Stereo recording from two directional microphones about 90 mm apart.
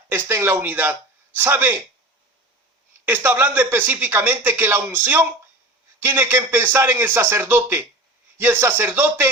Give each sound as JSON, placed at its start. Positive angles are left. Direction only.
{"t": 0.1, "sound": "speech", "side_deg": -25}
{"t": 3.1, "sound": "speech", "side_deg": -25}